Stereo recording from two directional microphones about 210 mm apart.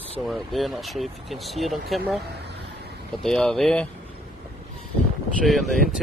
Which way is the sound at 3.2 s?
5° left (ahead or behind).